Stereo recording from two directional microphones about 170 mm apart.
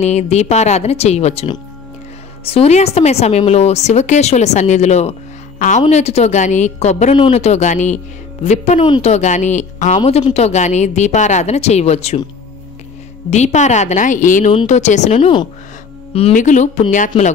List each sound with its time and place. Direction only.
0.0 s a woman's voice: 40° left (ahead or behind)
9.9 s speech: 30° left (ahead or behind)
13.3 s a woman's voice: 45° left (ahead or behind)
16.3 s a woman's voice: 45° left (ahead or behind)